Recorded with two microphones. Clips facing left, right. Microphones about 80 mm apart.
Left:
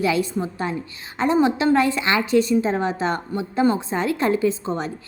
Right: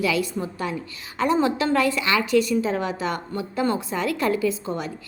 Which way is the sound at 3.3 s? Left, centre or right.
Centre.